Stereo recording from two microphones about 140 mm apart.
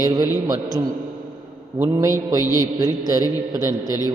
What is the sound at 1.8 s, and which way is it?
Speech, 20° right (ahead or behind).